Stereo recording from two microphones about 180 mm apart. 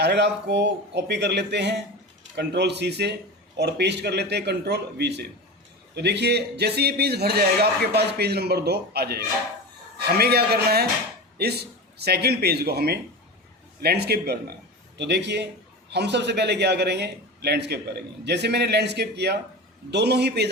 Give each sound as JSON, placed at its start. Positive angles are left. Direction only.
{"t": 0.0, "sound": "a man's voice", "side_deg": -70}